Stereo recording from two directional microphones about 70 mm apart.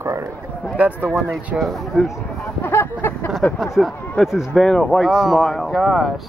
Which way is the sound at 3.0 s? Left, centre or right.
Left.